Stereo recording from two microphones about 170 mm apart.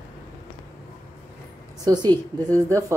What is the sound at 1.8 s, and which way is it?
A woman's voice, 25° right (ahead or behind).